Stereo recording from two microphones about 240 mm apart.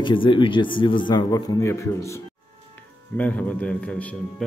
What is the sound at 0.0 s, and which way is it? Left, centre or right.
A man's voice, centre.